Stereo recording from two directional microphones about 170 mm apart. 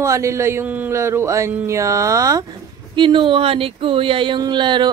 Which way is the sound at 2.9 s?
30° right (ahead or behind).